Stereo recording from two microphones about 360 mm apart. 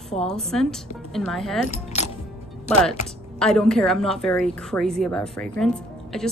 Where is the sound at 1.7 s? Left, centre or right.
Centre.